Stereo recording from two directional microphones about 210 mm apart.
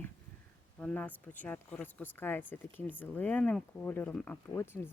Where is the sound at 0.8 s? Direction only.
5° left (ahead or behind).